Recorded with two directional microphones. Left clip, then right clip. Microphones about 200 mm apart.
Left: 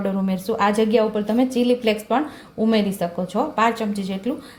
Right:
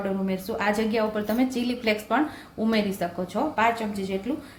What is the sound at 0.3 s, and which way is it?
A woman's voice, 30° left (ahead or behind).